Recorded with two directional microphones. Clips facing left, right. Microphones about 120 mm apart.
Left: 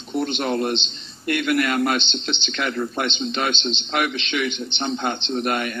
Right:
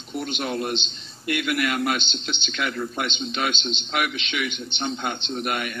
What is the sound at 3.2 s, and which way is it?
Speech, 35° left (ahead or behind).